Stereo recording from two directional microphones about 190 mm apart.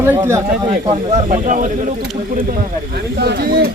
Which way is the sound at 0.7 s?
35° right (ahead or behind).